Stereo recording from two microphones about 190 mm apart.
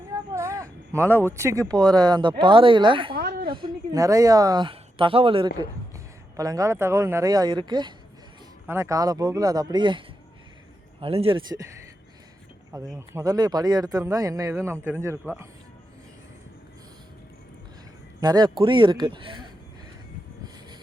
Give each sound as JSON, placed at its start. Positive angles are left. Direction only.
{"t": 0.3, "sound": "a sound", "side_deg": -15}
{"t": 1.7, "sound": "speech", "side_deg": -20}
{"t": 3.2, "sound": "a sound", "side_deg": -50}
{"t": 3.5, "sound": "speech", "side_deg": -20}
{"t": 6.3, "sound": "speech", "side_deg": -15}
{"t": 11.0, "sound": "speech", "side_deg": -30}
{"t": 12.7, "sound": "speech", "side_deg": -15}
{"t": 18.2, "sound": "speech", "side_deg": -20}